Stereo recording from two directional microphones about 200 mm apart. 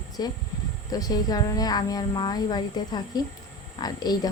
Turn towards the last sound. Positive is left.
turn(degrees=20)  # may be behind; listen again after turning